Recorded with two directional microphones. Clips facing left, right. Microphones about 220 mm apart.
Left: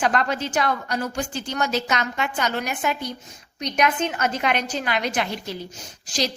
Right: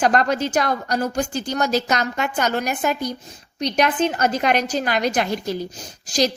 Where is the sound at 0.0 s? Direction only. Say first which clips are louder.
Right 4 dB; 40° right (ahead or behind).